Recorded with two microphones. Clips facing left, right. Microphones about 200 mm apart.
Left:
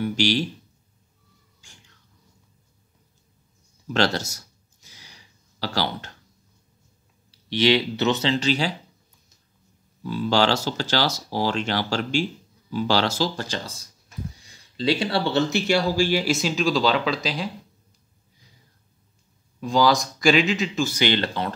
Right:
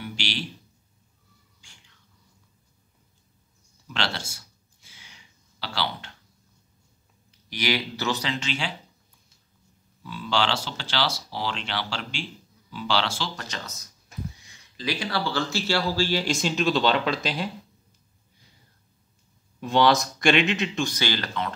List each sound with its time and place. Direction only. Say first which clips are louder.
0.0 s speech: left 11 dB; 45° left (ahead or behind)
1.6 s cat: left 5 dB; 45° left (ahead or behind)
3.8 s a sound: left 9 dB; 45° left (ahead or behind)
7.2 s speech: left 8 dB; 25° left (ahead or behind)
10.0 s speech: left 6 dB; 40° left (ahead or behind); by 17.5 s centre (ahead or behind)
19.6 s speech: left 1 dB; centre (ahead or behind)
21.0 s speech: left 5 dB; 25° left (ahead or behind)